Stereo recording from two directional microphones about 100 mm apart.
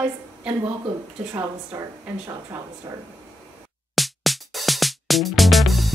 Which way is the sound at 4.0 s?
Centre (ahead or behind).